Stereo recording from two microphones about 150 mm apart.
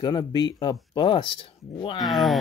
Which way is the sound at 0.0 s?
30° left (ahead or behind).